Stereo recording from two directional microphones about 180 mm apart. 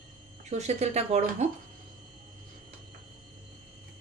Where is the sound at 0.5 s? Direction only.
40° right (ahead or behind).